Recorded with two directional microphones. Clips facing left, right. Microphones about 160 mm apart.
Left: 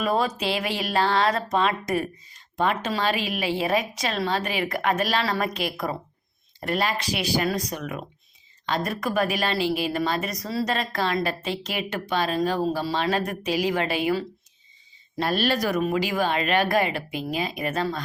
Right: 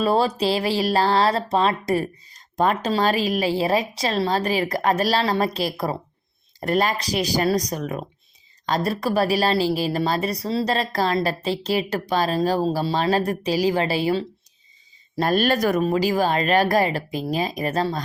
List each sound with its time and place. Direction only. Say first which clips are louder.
0.0 s speech: right 4 dB; 30° right (ahead or behind)
15.1 s speech: right 4 dB; 45° right (ahead or behind)
15.8 s speech: right 4 dB; 35° right (ahead or behind)